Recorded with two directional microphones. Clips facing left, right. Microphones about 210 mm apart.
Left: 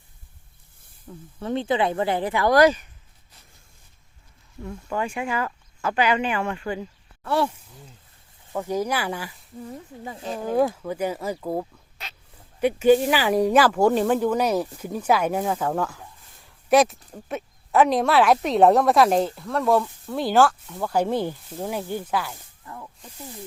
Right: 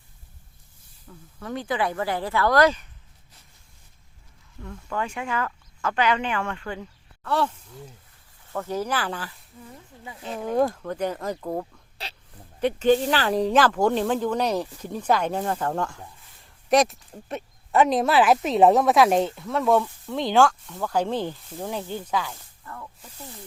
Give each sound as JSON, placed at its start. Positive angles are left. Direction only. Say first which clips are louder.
{"t": 1.4, "sound": "speech", "louder": "left 4 dB", "side_deg": 25}
{"t": 4.9, "sound": "speech", "louder": "left 2 dB", "side_deg": 10}
{"t": 8.5, "sound": "speech", "louder": "left 2 dB", "side_deg": 15}
{"t": 10.0, "sound": "speech", "louder": "left 3 dB", "side_deg": 35}
{"t": 10.3, "sound": "speech", "louder": "left 1 dB", "side_deg": 5}
{"t": 12.0, "sound": "speech", "louder": "right 3 dB", "side_deg": -30}
{"t": 12.5, "sound": "speech", "louder": "left 3 dB", "side_deg": 10}
{"t": 22.6, "sound": "snake", "louder": "even", "side_deg": 15}